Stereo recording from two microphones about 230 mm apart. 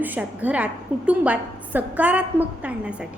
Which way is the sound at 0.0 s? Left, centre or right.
Centre.